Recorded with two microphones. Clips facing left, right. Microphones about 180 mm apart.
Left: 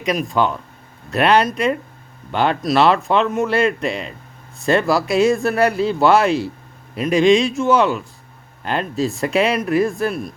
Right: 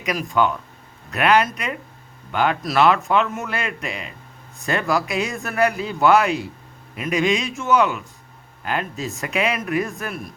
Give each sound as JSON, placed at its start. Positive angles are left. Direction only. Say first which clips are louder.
{"t": 0.0, "sound": "a man's voice", "louder": "left 2 dB", "side_deg": 25}
{"t": 5.0, "sound": "speech", "louder": "left 9 dB", "side_deg": -15}
{"t": 5.3, "sound": "a man's voice", "louder": "left 5 dB", "side_deg": 30}